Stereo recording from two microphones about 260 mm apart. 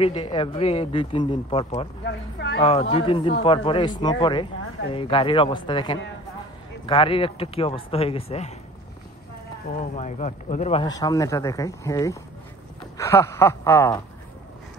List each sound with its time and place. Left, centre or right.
0.0 s speech: centre
2.0 s speech: left
2.6 s speech: left
9.8 s speech: left; by 14.0 s centre